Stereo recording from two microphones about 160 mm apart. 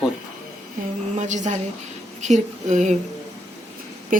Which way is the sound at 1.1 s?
50° right (ahead or behind).